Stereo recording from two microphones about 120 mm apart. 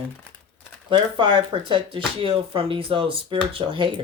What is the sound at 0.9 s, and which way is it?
Speech, 45° right (ahead or behind).